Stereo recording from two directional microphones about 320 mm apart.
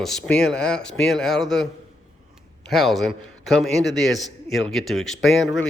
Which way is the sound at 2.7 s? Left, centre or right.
Centre.